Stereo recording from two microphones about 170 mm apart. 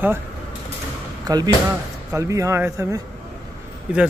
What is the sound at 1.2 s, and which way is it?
A man's voice, 25° right (ahead or behind).